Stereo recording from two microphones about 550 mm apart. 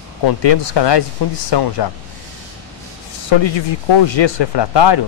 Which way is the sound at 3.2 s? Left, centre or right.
Left.